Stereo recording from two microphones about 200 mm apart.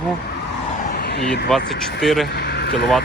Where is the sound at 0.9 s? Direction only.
55° left (ahead or behind).